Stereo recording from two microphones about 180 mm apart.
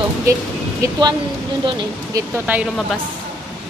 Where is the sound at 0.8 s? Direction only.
25° right (ahead or behind).